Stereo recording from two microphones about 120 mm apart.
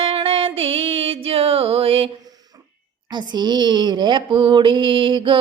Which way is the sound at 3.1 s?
35° right (ahead or behind).